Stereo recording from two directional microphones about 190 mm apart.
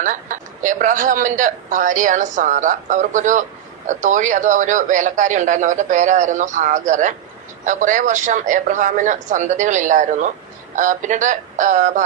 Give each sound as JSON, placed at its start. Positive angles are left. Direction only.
{"t": 0.0, "sound": "speech", "side_deg": -40}